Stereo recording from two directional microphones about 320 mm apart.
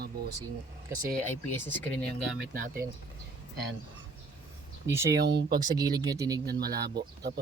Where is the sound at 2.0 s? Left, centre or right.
Right.